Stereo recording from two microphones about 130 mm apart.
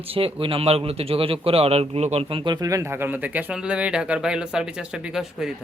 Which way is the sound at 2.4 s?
35° right (ahead or behind).